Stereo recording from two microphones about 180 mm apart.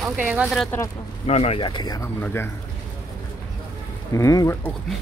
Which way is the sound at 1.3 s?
35° left (ahead or behind).